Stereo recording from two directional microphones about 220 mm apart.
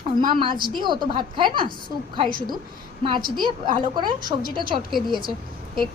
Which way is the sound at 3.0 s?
20° right (ahead or behind).